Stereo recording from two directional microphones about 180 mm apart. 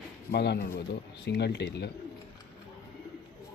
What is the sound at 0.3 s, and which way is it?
Speech, 65° left (ahead or behind).